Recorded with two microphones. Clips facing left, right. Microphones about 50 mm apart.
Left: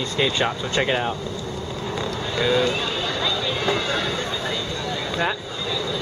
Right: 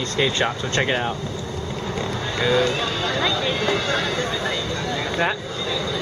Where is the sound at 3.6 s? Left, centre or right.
Centre.